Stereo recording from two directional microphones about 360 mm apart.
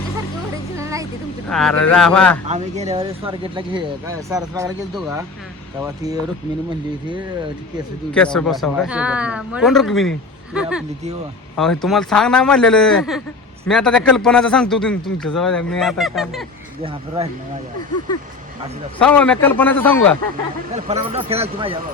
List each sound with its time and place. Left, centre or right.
0.5 s a sound: centre
1.5 s speech: centre
2.5 s speech: centre
8.1 s speech: centre
18.9 s speech: centre
20.7 s speech: centre